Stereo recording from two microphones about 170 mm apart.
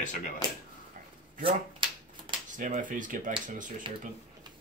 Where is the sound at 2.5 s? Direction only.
50° right (ahead or behind).